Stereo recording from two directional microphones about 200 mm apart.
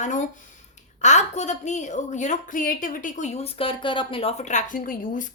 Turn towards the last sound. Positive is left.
turn(degrees=40)  # may be behind; listen again after turning